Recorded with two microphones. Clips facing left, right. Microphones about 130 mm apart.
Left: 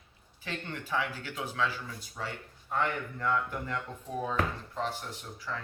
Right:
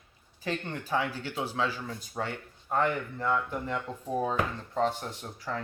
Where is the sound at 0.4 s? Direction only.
35° right (ahead or behind).